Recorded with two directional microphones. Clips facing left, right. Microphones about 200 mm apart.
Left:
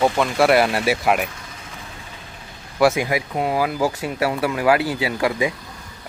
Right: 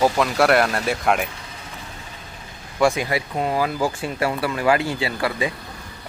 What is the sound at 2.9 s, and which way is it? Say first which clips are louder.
Speech: left 2 dB; 15° left (ahead or behind).